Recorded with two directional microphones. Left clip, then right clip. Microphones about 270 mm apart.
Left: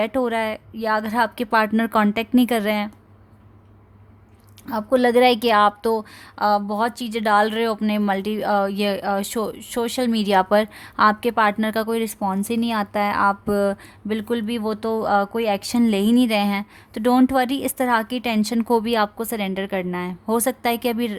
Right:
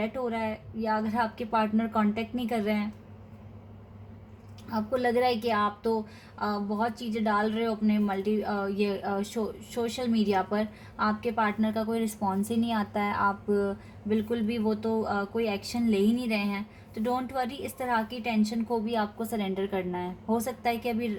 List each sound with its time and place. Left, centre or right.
0.0 s a woman's voice: left
4.7 s a woman's voice: left
20.4 s a woman's voice: left